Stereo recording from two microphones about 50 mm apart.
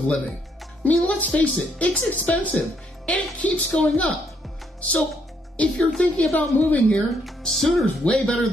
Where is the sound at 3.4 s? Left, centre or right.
Left.